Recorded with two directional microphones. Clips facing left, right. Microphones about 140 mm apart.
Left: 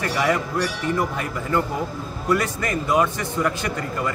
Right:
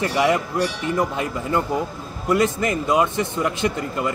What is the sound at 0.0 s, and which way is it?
A man's voice, 20° right (ahead or behind).